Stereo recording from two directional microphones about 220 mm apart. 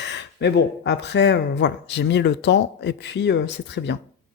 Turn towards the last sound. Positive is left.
turn(degrees=50)  # may be behind; listen again after turning